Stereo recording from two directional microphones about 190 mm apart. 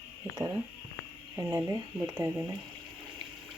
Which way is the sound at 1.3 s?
15° right (ahead or behind).